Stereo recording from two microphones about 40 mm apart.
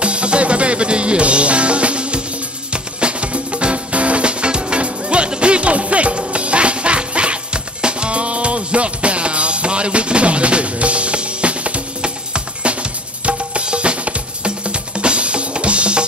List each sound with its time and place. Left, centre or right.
0.0 s music: right